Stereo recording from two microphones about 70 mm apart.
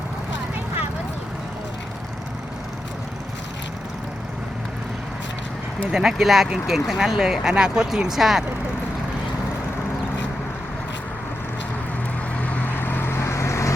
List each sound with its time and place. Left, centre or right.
5.9 s speech: centre
12.4 s vehicle: left